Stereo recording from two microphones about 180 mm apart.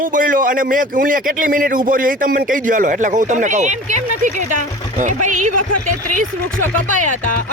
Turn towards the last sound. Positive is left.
turn(degrees=-45)  # may be behind; listen again after turning